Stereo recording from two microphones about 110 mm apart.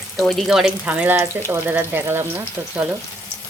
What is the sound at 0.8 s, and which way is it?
Speech, 15° right (ahead or behind).